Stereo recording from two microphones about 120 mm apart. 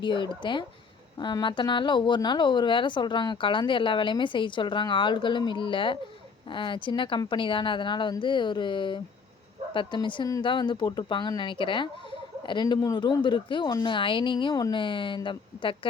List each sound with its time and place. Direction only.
0.0 s a woman's voice: 40° left (ahead or behind)